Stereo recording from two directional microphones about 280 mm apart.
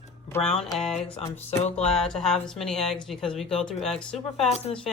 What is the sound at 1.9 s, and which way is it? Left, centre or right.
Speech, centre.